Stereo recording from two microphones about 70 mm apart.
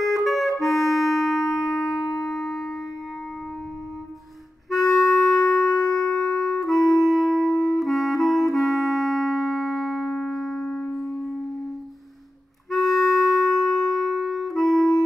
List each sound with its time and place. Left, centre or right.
0.0 s music: centre
4.6 s clarinet: centre
7.0 s music: centre
7.4 s music: left
7.8 s clarinet: centre
12.7 s clarinet: centre